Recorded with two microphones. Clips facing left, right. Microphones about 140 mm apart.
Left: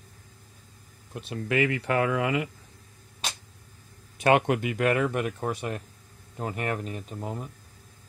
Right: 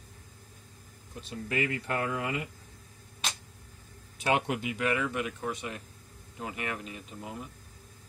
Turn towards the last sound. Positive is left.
turn(degrees=45)  # may be behind; listen again after turning